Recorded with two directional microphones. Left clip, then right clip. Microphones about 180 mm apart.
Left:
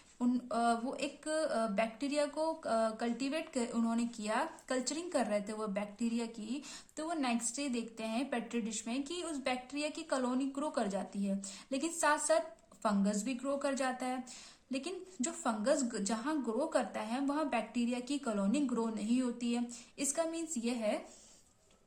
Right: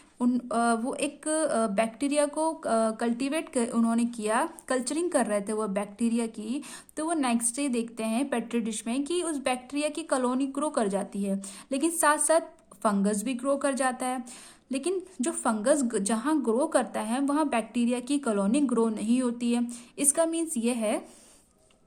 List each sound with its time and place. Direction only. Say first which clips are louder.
0.2 s speech: right 7 dB; 45° right (ahead or behind)